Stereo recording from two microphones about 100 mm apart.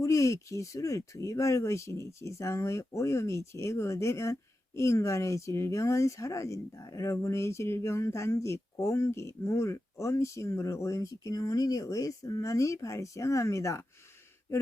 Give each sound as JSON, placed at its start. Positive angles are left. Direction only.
{"t": 0.0, "sound": "speech", "side_deg": 30}